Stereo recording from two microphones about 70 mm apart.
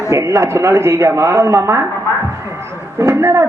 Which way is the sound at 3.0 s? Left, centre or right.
Right.